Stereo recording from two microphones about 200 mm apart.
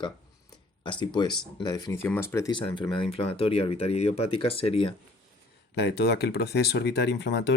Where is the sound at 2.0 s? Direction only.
10° left (ahead or behind).